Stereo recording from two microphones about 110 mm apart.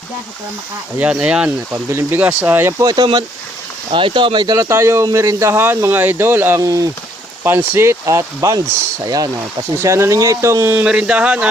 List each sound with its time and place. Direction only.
0.9 s speech: 10° right (ahead or behind)
1.7 s speech: 25° right (ahead or behind)
2.8 s speech: 35° right (ahead or behind)
3.9 s speech: 50° right (ahead or behind)
4.7 s speech: 25° right (ahead or behind)
6.6 s speech: 30° right (ahead or behind)
7.4 s speech: 15° right (ahead or behind)
10.8 s speech: 10° right (ahead or behind)